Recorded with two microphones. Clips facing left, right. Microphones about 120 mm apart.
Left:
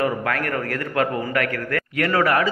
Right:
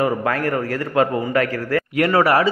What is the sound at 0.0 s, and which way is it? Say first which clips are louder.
A man's voice: right 3 dB; 30° right (ahead or behind).